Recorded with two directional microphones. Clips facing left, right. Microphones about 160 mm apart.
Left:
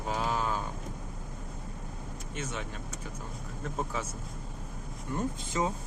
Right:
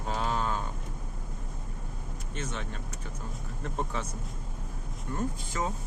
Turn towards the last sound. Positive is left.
turn(degrees=20)  # may be behind; listen again after turning